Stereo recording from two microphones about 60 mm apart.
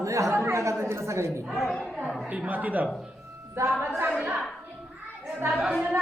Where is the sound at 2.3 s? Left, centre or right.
Right.